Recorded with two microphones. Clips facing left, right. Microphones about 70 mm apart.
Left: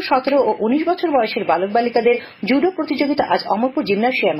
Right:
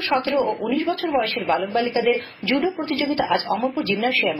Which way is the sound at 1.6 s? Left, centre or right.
Left.